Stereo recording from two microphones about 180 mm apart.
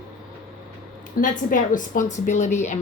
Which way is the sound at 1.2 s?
45° left (ahead or behind).